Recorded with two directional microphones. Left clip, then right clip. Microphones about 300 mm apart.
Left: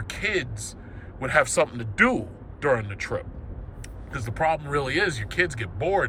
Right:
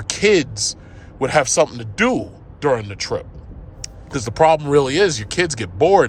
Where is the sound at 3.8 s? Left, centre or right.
Centre.